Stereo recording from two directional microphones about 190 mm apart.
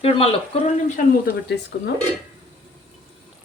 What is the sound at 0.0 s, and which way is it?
Speech, 30° left (ahead or behind).